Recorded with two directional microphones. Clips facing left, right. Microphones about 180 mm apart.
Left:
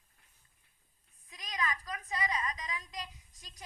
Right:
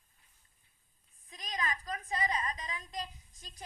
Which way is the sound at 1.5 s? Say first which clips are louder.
Even; 25° right (ahead or behind).